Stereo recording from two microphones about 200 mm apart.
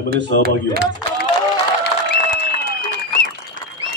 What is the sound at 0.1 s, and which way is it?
Speech, 50° right (ahead or behind).